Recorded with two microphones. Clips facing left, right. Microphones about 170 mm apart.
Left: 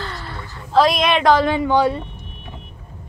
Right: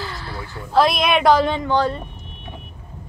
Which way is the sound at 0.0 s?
5° right (ahead or behind).